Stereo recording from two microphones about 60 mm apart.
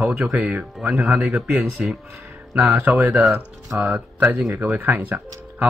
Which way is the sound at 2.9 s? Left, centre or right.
Right.